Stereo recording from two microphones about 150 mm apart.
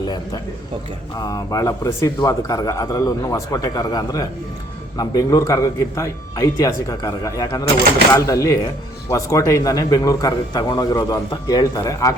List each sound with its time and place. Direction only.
1.1 s speech: 25° left (ahead or behind)